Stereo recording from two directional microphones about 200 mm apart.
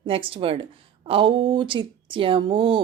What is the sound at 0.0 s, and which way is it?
Speech, 25° right (ahead or behind).